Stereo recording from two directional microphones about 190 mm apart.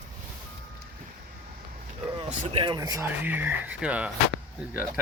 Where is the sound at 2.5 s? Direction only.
25° right (ahead or behind).